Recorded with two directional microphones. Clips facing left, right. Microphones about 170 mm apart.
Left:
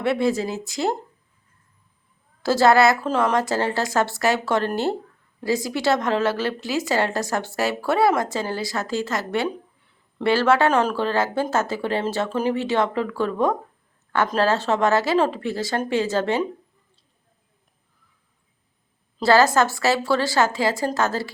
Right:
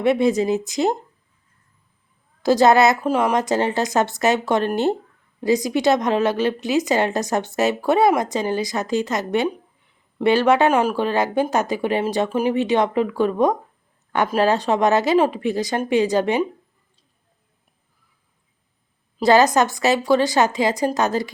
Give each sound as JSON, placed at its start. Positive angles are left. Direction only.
{"t": 0.0, "sound": "a woman's voice", "side_deg": -20}
{"t": 2.4, "sound": "a woman's voice", "side_deg": -20}
{"t": 19.2, "sound": "speech", "side_deg": -20}